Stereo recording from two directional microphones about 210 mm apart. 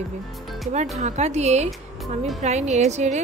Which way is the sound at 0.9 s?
35° right (ahead or behind).